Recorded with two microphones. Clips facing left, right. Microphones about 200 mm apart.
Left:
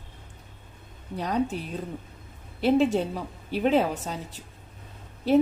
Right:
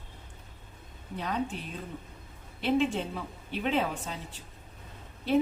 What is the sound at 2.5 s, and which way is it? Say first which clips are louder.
A woman's voice: left 6 dB; 40° left (ahead or behind).